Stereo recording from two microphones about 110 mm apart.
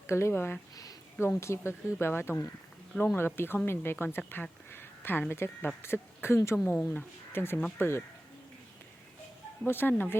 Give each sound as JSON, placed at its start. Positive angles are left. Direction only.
{"t": 0.1, "sound": "speech", "side_deg": 25}
{"t": 4.7, "sound": "a sound", "side_deg": 20}
{"t": 5.3, "sound": "speech", "side_deg": 20}
{"t": 9.6, "sound": "speech", "side_deg": 20}